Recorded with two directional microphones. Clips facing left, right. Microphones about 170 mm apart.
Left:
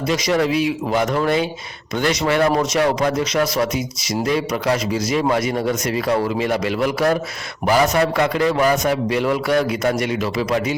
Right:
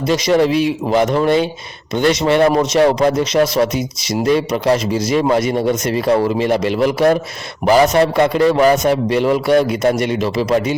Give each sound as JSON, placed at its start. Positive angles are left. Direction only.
{"t": 0.1, "sound": "speech", "side_deg": -30}